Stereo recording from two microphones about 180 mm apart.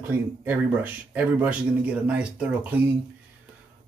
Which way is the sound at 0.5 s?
10° right (ahead or behind).